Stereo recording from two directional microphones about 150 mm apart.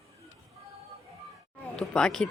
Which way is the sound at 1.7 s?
5° left (ahead or behind).